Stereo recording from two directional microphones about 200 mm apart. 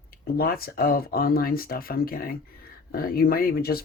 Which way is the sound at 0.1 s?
50° left (ahead or behind).